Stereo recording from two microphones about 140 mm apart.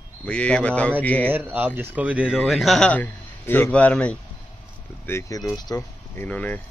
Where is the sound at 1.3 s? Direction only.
15° right (ahead or behind); by 4.2 s 10° left (ahead or behind).